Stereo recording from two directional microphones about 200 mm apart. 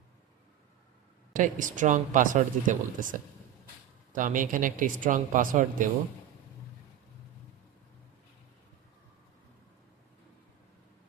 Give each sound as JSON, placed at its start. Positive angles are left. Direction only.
{"t": 1.3, "sound": "speech", "side_deg": -40}